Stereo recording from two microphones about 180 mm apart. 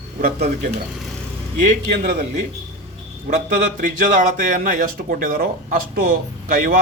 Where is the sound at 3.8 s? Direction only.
50° right (ahead or behind).